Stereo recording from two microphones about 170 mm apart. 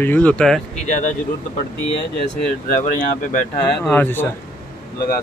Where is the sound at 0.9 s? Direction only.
45° left (ahead or behind).